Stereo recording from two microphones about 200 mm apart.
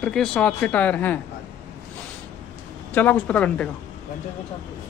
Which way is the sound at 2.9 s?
10° left (ahead or behind).